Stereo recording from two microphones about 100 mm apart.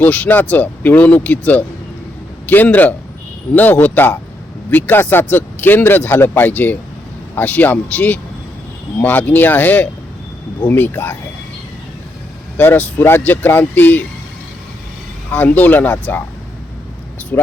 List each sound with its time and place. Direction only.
0.0 s speech: 15° left (ahead or behind)
12.5 s speech: 15° left (ahead or behind)
15.3 s speech: 20° left (ahead or behind)
17.3 s speech: 20° left (ahead or behind)